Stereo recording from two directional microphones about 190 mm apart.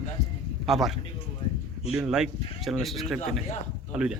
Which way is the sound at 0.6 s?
Centre (ahead or behind).